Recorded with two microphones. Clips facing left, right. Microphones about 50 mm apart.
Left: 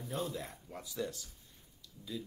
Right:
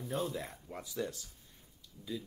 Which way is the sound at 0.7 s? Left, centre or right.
Right.